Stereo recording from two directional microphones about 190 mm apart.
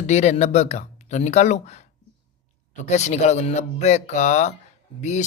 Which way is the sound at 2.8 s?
35° left (ahead or behind).